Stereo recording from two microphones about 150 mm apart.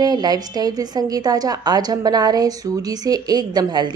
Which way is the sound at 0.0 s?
25° right (ahead or behind).